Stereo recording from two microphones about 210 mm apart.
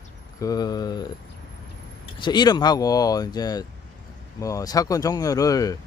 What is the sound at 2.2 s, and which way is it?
Speech, 20° left (ahead or behind).